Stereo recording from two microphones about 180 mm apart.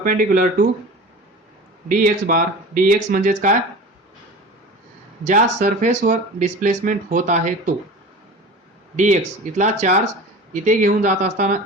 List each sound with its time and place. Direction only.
0.0 s speech: 50° right (ahead or behind)
1.9 s speech: 50° right (ahead or behind)
5.2 s speech: 45° right (ahead or behind)
9.0 s speech: 45° right (ahead or behind)